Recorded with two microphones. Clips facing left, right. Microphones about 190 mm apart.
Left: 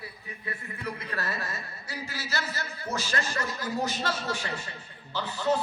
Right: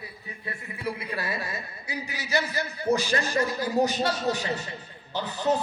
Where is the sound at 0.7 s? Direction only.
10° right (ahead or behind).